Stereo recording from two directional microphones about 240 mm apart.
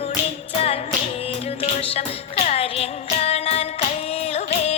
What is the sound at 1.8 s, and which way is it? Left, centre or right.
Music, left.